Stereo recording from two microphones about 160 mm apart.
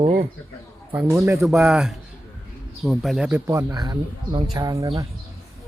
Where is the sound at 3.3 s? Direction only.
15° right (ahead or behind).